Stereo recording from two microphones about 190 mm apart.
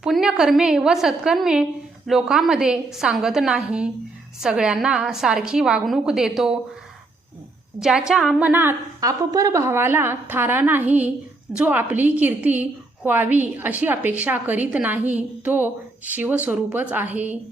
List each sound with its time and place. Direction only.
0.0 s a woman's voice: centre (ahead or behind)
7.8 s a woman's voice: 5° right (ahead or behind)